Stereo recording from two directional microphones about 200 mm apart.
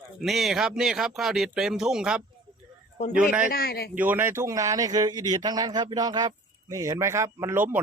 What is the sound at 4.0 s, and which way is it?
A man's voice, 10° right (ahead or behind).